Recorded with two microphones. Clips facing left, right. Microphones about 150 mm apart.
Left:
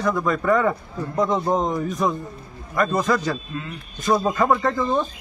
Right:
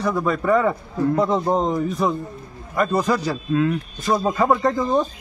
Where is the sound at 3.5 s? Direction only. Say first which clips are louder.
Right 13 dB; 90° right.